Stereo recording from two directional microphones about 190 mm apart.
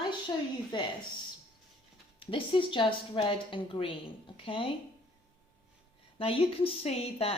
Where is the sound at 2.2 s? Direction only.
25° left (ahead or behind).